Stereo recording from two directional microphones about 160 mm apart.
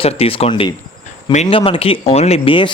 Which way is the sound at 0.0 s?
35° left (ahead or behind).